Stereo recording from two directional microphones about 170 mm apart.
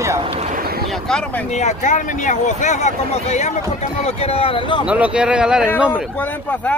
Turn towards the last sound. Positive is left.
turn(degrees=10)  # may be behind; listen again after turning